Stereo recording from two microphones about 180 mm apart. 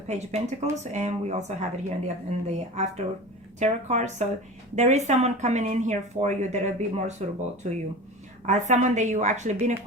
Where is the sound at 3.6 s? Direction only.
40° right (ahead or behind).